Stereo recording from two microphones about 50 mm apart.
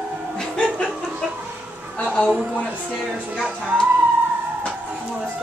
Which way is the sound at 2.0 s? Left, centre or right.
Left.